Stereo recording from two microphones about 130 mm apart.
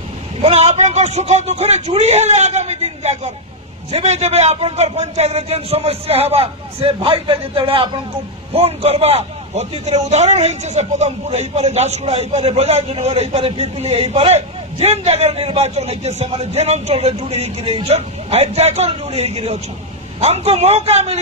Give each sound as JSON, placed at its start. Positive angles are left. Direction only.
{"t": 0.4, "sound": "a man's voice", "side_deg": -55}
{"t": 8.5, "sound": "a man's voice", "side_deg": -50}